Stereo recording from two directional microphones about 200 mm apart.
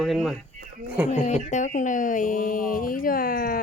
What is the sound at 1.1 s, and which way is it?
Speech, 35° left (ahead or behind).